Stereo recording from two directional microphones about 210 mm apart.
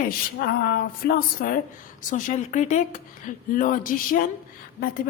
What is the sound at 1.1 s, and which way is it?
A woman's voice, 40° left (ahead or behind).